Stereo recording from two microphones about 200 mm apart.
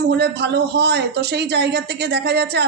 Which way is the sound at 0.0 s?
55° right (ahead or behind).